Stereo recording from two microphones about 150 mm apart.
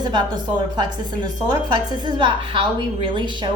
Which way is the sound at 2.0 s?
30° right (ahead or behind).